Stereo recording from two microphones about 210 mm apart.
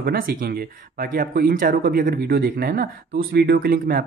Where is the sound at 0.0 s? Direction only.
45° right (ahead or behind).